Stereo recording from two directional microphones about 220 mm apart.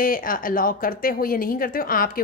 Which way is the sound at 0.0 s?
40° left (ahead or behind).